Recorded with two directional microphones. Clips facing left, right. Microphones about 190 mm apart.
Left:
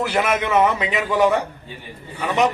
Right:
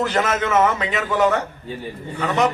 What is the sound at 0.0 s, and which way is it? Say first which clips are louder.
A man's voice: even; 10° left (ahead or behind).